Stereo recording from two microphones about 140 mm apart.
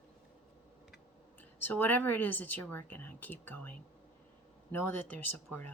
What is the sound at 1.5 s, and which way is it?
Speech, 15° left (ahead or behind).